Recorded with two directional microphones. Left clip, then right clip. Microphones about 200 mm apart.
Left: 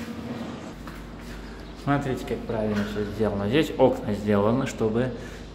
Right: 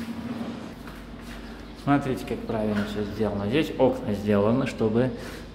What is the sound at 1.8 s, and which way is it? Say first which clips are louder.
Speech: right 1 dB; 5° right (ahead or behind).